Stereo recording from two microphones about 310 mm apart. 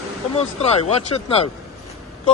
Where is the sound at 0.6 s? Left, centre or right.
Left.